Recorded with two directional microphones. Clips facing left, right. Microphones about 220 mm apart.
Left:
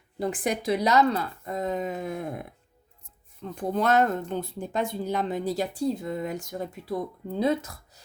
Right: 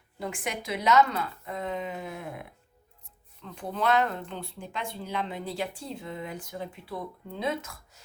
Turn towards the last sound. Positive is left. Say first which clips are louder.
# left 7 dB
turn(degrees=35)  # may be behind; listen again after turning